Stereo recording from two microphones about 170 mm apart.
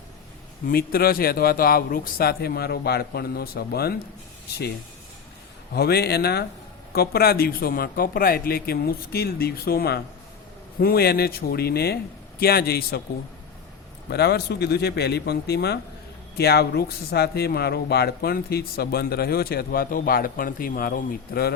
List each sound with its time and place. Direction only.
0.7 s a man's voice: 65° left (ahead or behind)
5.7 s a man's voice: 70° left (ahead or behind)
14.1 s a man's voice: 70° left (ahead or behind)